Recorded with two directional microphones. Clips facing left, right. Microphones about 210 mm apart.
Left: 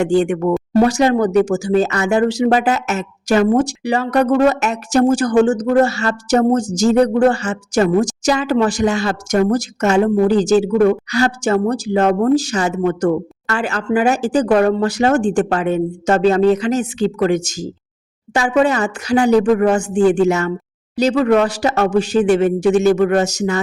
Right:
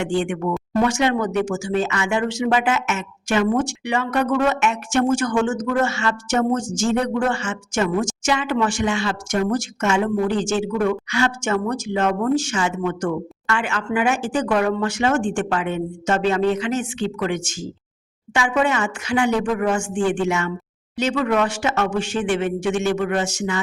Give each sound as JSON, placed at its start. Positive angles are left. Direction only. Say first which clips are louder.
{"t": 0.0, "sound": "speech", "louder": "left 7 dB", "side_deg": 40}